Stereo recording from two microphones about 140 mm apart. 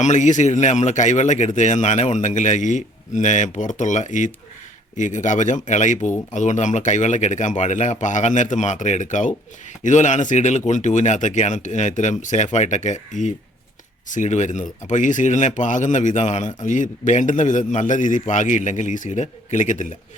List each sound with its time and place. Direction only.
0.0 s speech: 60° left (ahead or behind)